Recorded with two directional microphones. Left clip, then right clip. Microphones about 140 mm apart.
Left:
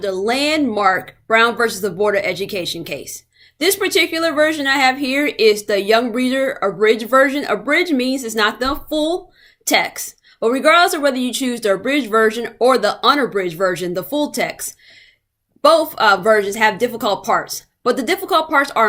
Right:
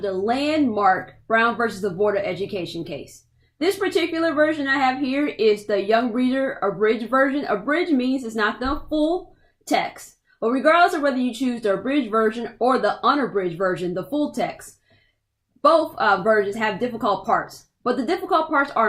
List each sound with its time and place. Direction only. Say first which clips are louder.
0.0 s a woman's voice: left 4 dB; 20° left (ahead or behind)
15.6 s a woman's voice: left 5 dB; 20° left (ahead or behind)